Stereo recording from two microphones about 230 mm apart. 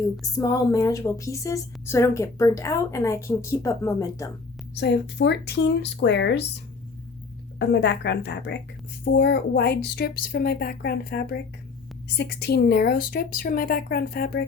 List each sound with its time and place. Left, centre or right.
0.3 s a woman's voice: centre
4.7 s speech: left
7.6 s speech: left